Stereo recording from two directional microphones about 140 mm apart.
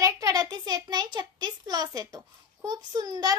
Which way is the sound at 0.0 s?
25° right (ahead or behind).